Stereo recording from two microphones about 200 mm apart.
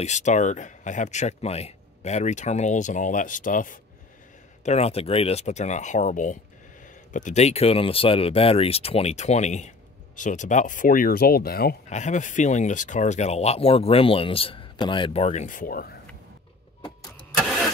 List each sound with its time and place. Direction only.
0.0 s speech: 35° left (ahead or behind)
4.6 s speech: 30° left (ahead or behind); by 11.7 s 50° left (ahead or behind)
11.9 s speech: 35° left (ahead or behind)
17.4 s vehicle: centre (ahead or behind)